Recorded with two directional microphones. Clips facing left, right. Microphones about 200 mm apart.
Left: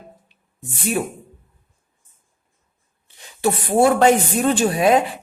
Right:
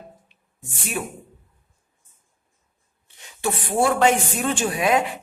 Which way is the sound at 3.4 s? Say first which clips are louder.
Left 5 dB; 40° left (ahead or behind).